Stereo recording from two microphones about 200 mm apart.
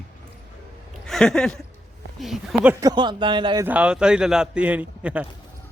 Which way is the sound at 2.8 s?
20° right (ahead or behind).